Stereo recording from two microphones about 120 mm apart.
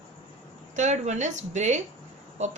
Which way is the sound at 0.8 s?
75° right (ahead or behind).